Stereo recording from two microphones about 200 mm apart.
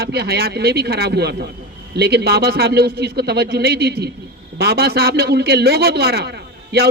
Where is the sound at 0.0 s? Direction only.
50° right (ahead or behind).